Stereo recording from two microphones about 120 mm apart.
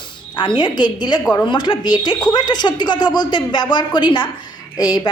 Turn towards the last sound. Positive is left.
turn(degrees=35)  # may be behind; listen again after turning